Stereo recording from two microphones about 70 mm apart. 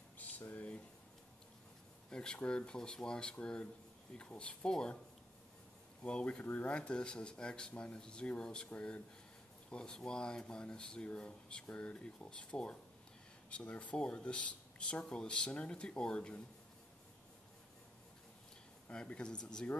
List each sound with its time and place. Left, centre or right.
0.4 s a sound: left
2.0 s speech: centre
6.0 s speech: centre
18.9 s speech: centre